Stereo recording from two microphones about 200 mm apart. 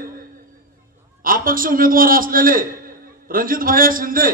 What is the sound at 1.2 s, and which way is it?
A man's voice, 45° right (ahead or behind).